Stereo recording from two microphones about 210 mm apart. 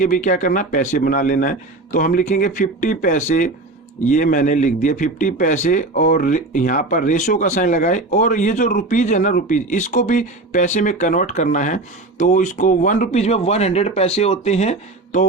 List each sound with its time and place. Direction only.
0.0 s a man's voice: 40° left (ahead or behind)